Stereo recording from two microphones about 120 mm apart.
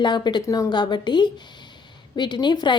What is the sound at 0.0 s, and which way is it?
Speech, 40° left (ahead or behind).